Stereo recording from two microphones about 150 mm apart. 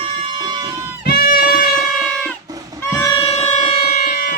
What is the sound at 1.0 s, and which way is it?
Music, 90° left.